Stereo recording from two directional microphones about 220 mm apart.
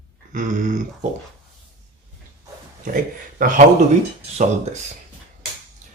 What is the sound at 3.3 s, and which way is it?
Speech, 35° right (ahead or behind).